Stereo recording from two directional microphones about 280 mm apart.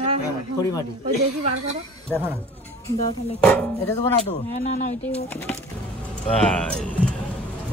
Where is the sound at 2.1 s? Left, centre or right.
Centre.